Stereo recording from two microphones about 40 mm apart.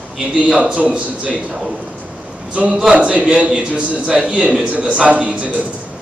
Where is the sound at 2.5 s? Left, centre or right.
Right.